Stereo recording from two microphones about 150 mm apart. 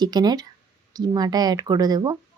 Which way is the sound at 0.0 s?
25° right (ahead or behind).